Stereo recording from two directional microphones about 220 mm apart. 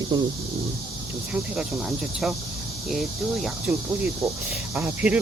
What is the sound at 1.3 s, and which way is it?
Speech, 5° right (ahead or behind).